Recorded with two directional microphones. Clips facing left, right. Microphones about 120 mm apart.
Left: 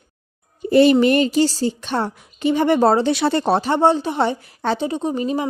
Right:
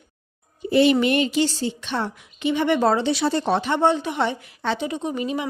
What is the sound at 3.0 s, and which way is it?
Speech, 60° left (ahead or behind).